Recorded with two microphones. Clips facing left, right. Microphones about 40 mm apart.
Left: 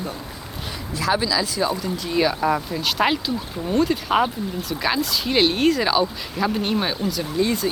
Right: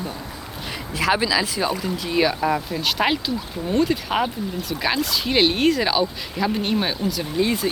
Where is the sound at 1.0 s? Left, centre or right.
Right.